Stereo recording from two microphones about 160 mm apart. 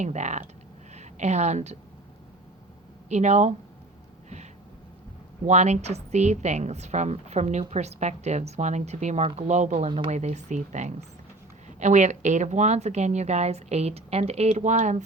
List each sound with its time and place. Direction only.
0.0 s a woman's voice: 50° right (ahead or behind)
3.1 s a woman's voice: 45° right (ahead or behind)
5.5 s a woman's voice: 45° right (ahead or behind)